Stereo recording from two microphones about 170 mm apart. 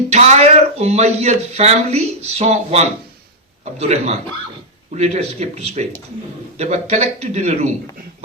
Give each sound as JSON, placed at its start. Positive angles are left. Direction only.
{"t": 0.1, "sound": "a man's voice", "side_deg": -40}